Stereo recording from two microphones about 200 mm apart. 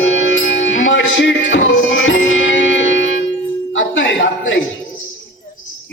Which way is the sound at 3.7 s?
70° left (ahead or behind).